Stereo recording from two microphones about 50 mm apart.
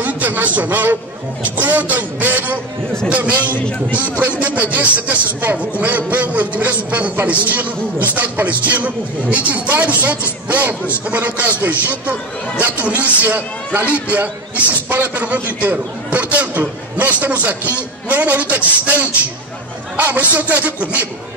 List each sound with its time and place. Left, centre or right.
0.0 s a man's voice: right